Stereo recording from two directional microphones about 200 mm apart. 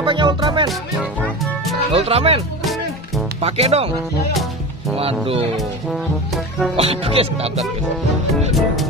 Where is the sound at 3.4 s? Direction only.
30° right (ahead or behind).